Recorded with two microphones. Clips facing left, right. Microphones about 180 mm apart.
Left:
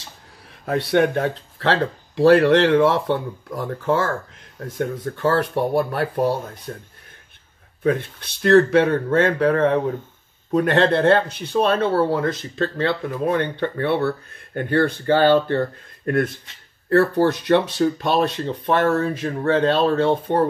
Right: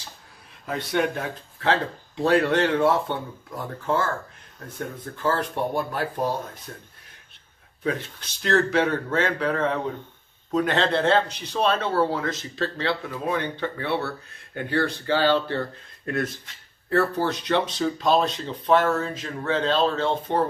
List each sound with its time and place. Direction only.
0.7 s speech: 65° left (ahead or behind); by 4.1 s 85° left
4.7 s speech: 75° left (ahead or behind)
6.7 s speech: 45° left (ahead or behind)
8.4 s speech: 55° left (ahead or behind)